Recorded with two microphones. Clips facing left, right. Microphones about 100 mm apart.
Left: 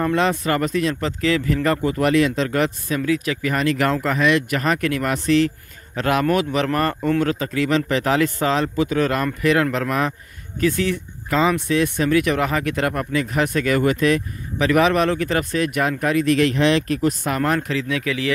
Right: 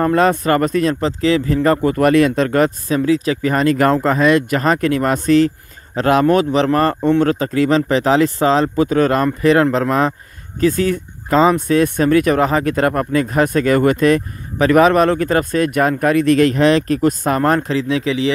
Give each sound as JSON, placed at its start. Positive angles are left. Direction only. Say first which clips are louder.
{"t": 0.0, "sound": "speech", "louder": "right 5 dB", "side_deg": -45}
{"t": 1.9, "sound": "speech", "louder": "right 4 dB", "side_deg": -50}
{"t": 3.0, "sound": "speech", "louder": "right 6 dB", "side_deg": -30}
{"t": 10.6, "sound": "speech", "louder": "right 5 dB", "side_deg": -40}